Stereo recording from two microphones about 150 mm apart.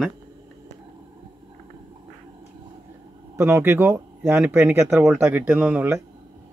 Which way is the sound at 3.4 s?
15° right (ahead or behind).